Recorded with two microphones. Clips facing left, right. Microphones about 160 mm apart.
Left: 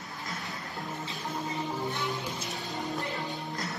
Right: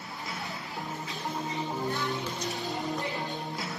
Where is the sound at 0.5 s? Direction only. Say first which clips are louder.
Right 1 dB; centre (ahead or behind).